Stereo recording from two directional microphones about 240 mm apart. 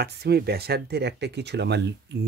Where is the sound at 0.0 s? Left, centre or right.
Right.